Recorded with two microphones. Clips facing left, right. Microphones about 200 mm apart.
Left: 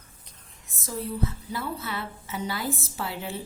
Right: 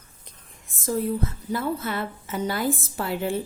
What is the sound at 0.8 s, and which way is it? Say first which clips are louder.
A woman's voice: right 5 dB; 50° right (ahead or behind).